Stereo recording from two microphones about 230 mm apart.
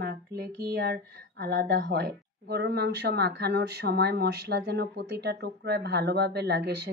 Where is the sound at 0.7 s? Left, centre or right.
Right.